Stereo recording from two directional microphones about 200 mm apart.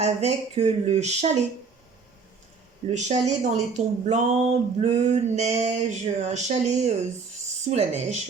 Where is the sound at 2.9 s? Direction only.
35° right (ahead or behind).